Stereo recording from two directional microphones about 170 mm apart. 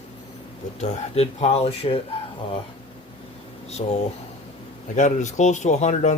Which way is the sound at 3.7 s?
40° left (ahead or behind).